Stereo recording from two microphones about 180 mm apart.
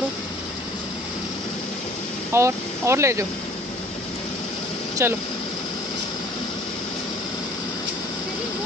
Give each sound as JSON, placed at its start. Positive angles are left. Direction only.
{"t": 2.3, "sound": "speech", "side_deg": -15}
{"t": 5.0, "sound": "speech", "side_deg": -15}